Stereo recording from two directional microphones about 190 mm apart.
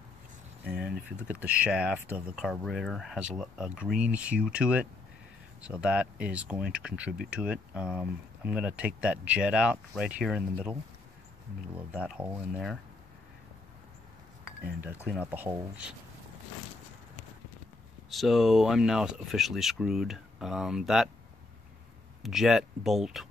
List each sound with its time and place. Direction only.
0.7 s speech: 5° right (ahead or behind)
14.8 s speech: 10° right (ahead or behind)
18.1 s speech: centre (ahead or behind)
22.2 s speech: centre (ahead or behind)